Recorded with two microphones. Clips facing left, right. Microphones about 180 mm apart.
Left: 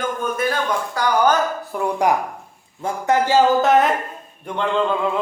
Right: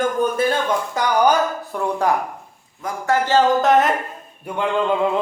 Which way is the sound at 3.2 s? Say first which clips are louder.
Even; 5° left (ahead or behind).